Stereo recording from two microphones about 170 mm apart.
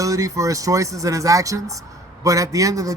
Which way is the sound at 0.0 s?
20° right (ahead or behind).